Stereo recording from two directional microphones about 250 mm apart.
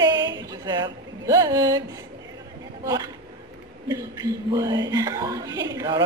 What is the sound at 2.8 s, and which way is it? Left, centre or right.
Speech, centre.